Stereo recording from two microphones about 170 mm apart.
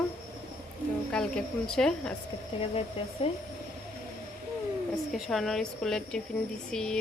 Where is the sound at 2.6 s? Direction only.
35° left (ahead or behind).